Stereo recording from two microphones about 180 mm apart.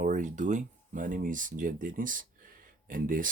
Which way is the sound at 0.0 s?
45° right (ahead or behind).